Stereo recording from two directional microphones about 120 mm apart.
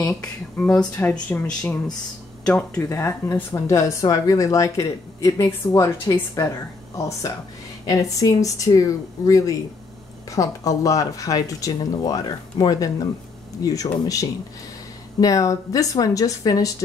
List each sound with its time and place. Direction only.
0.0 s speech: 10° left (ahead or behind)
2.8 s speech: 25° left (ahead or behind)